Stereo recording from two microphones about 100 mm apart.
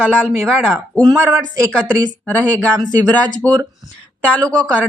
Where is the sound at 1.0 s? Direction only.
40° right (ahead or behind).